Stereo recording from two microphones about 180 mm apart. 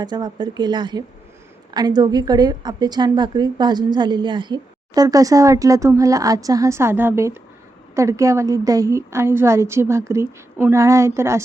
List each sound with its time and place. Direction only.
0.0 s a woman's voice: 25° right (ahead or behind)